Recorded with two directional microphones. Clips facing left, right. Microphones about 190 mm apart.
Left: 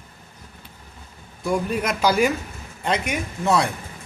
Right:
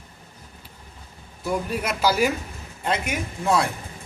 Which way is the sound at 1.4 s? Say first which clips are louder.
Left 3 dB; 5° right (ahead or behind).